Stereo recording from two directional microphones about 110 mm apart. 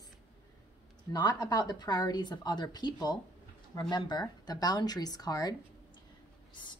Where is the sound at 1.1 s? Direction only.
40° left (ahead or behind).